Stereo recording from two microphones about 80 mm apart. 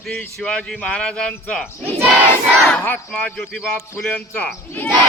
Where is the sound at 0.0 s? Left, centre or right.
Centre.